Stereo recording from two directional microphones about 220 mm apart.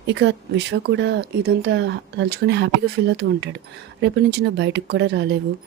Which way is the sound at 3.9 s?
50° right (ahead or behind).